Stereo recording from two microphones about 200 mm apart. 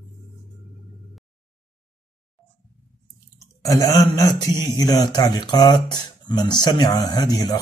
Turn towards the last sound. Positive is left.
turn(degrees=20)  # may be behind; listen again after turning